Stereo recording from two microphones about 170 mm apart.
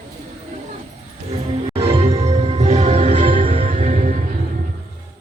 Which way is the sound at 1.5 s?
35° right (ahead or behind).